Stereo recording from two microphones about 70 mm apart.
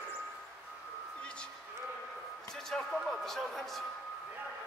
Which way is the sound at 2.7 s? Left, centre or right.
Centre.